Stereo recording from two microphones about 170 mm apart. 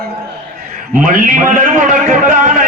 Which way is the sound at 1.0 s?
50° right (ahead or behind).